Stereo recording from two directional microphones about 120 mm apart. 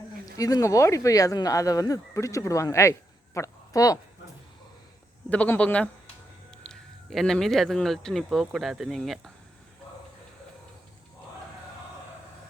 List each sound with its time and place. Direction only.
0.3 s speech: 30° left (ahead or behind)
5.3 s speech: 10° left (ahead or behind)